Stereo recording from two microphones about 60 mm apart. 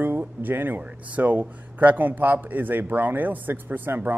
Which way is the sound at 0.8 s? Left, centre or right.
Right.